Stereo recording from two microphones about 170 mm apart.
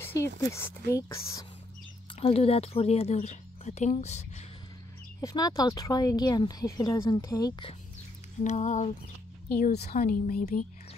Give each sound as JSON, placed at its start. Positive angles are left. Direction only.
{"t": 0.5, "sound": "speech", "side_deg": 15}
{"t": 2.1, "sound": "speech", "side_deg": 35}
{"t": 5.2, "sound": "speech", "side_deg": 20}
{"t": 8.5, "sound": "a sound", "side_deg": 45}
{"t": 9.6, "sound": "speech", "side_deg": 70}